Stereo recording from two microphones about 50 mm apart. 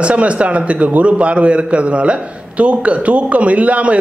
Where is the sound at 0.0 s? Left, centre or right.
Right.